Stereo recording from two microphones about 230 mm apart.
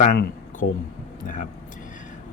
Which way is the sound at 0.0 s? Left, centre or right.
Left.